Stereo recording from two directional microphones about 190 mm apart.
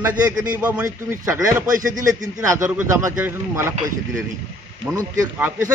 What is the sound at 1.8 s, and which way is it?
Speech, 45° right (ahead or behind).